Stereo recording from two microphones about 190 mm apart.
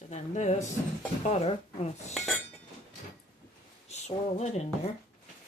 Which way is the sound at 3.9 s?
35° left (ahead or behind).